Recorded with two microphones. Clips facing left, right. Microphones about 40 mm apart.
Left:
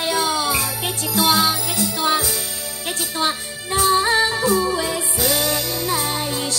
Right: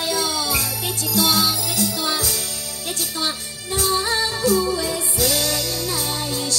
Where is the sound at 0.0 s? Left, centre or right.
Left.